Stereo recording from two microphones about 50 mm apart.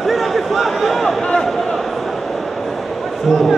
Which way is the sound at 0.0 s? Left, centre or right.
Centre.